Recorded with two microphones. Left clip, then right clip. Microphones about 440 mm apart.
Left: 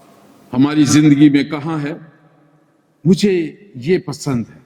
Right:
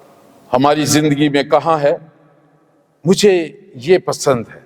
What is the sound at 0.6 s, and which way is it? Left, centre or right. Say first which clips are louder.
A man's voice: left 2 dB; right.